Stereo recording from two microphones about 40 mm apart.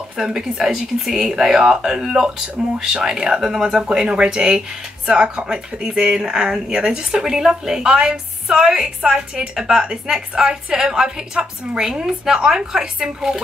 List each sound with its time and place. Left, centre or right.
0.2 s a woman's voice: centre